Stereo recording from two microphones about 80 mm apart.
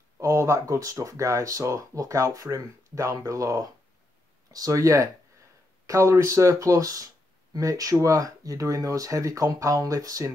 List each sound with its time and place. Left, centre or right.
0.2 s speech: right